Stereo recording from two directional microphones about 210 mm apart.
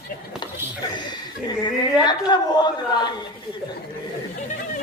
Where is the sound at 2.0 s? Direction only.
20° left (ahead or behind).